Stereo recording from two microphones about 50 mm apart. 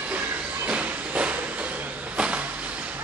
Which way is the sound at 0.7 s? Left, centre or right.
Right.